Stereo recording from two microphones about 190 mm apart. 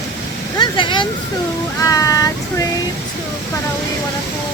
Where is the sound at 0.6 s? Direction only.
25° left (ahead or behind).